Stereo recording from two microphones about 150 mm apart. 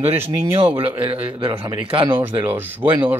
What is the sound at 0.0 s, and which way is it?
Speech, 45° right (ahead or behind).